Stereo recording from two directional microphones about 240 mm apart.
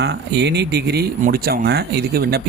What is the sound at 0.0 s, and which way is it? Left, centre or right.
Speech, right.